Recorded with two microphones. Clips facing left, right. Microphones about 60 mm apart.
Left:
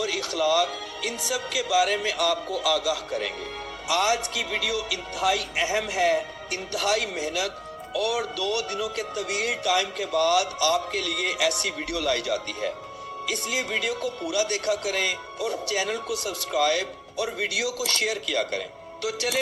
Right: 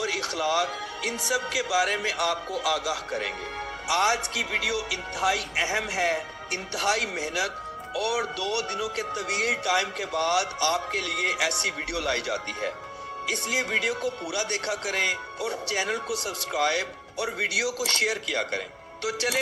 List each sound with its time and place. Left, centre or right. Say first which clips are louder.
0.0 s speech: left 2 dB; right